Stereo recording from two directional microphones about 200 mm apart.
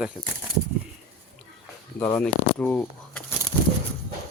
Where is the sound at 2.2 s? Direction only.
5° left (ahead or behind).